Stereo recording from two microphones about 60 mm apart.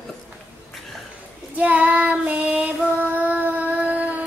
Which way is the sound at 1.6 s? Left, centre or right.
Right.